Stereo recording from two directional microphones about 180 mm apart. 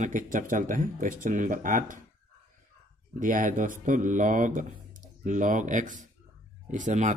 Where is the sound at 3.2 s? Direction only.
45° right (ahead or behind).